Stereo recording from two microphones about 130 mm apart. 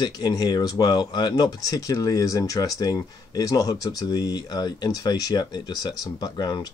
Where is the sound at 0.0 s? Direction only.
30° left (ahead or behind).